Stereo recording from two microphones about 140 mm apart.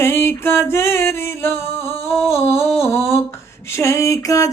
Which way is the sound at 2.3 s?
20° left (ahead or behind).